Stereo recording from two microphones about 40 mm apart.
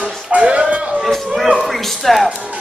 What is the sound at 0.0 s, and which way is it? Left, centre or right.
Music, right.